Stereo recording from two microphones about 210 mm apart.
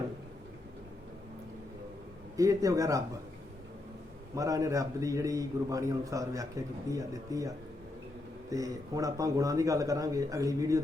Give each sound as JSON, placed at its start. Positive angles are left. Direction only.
{"t": 2.3, "sound": "a man's voice", "side_deg": -15}
{"t": 4.4, "sound": "a man's voice", "side_deg": -15}